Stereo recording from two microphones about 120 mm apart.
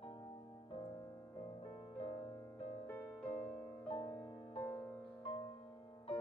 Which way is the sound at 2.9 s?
15° left (ahead or behind).